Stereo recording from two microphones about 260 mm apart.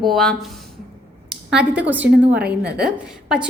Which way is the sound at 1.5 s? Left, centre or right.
Centre.